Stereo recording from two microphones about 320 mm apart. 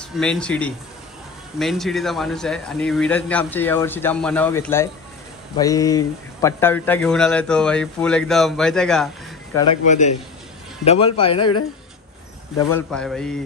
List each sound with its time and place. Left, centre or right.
0.0 s speech: centre
10.8 s speech: centre
12.5 s speech: centre